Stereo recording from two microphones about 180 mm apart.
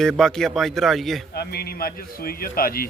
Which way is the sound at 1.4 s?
60° left (ahead or behind).